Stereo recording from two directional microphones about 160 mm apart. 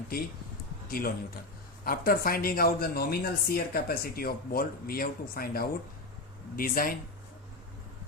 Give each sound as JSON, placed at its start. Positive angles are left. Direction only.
{"t": 0.9, "sound": "a man's voice", "side_deg": 65}